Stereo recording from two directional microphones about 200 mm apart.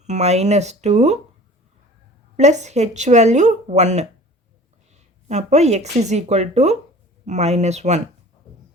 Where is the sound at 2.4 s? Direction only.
35° right (ahead or behind).